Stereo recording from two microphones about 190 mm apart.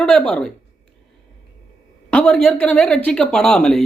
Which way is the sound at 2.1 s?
5° left (ahead or behind).